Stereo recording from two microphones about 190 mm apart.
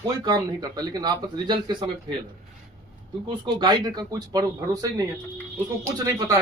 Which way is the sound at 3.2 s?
25° right (ahead or behind).